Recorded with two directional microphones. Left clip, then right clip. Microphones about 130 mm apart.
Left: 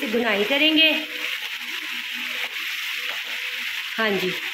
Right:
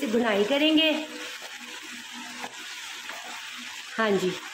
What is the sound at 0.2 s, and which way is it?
Speech, centre (ahead or behind).